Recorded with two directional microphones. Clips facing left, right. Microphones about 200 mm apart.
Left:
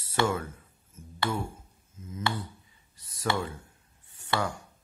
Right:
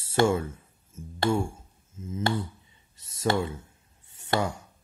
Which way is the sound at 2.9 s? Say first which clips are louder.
Right 4 dB; 25° right (ahead or behind).